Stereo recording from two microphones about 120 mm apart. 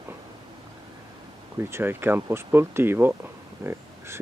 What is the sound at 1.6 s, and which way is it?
Speech, 20° right (ahead or behind).